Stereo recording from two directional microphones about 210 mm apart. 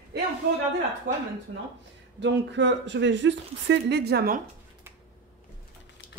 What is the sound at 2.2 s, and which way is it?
Speech, 55° right (ahead or behind).